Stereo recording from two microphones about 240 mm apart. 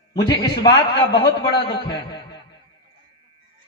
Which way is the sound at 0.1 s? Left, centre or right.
Centre.